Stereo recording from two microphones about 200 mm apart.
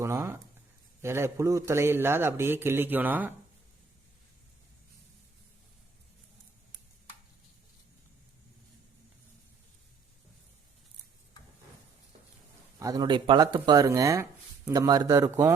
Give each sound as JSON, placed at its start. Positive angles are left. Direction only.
{"t": 0.0, "sound": "writing", "side_deg": -15}
{"t": 1.0, "sound": "speech", "side_deg": -15}
{"t": 12.8, "sound": "speech", "side_deg": -20}